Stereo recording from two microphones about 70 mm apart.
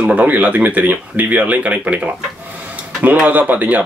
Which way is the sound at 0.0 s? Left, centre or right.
Right.